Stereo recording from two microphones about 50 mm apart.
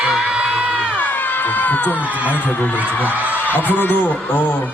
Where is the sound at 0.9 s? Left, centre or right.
Left.